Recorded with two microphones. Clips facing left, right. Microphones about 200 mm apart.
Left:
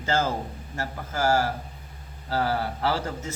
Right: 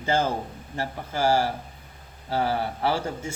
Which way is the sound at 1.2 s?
30° right (ahead or behind).